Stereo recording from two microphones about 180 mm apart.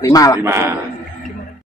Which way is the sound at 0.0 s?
20° left (ahead or behind).